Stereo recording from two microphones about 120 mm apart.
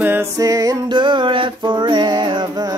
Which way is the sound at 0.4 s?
30° right (ahead or behind).